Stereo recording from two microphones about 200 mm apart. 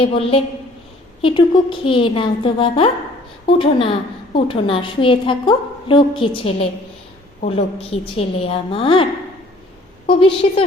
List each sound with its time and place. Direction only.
0.0 s a woman's voice: 30° left (ahead or behind)
10.1 s a woman's voice: 25° left (ahead or behind)